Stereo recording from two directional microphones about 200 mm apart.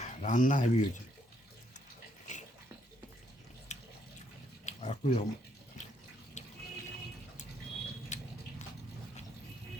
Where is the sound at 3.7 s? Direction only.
35° left (ahead or behind).